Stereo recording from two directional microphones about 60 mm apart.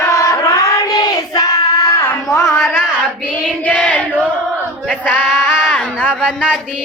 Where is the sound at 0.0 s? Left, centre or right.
Left.